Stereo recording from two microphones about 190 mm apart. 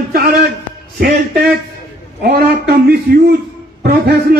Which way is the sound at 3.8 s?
55° right (ahead or behind).